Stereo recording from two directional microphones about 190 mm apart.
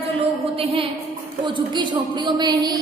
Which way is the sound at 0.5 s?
30° right (ahead or behind).